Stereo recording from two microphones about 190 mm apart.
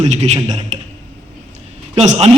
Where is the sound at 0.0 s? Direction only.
35° right (ahead or behind).